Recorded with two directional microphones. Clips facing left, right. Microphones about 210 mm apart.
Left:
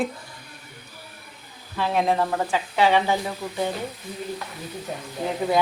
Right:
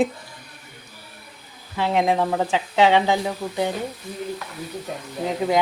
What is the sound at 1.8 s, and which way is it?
A woman's voice, 15° right (ahead or behind).